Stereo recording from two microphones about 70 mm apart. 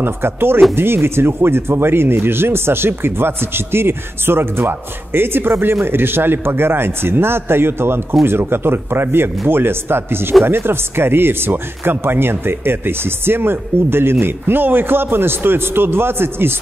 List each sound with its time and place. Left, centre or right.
0.0 s speech: right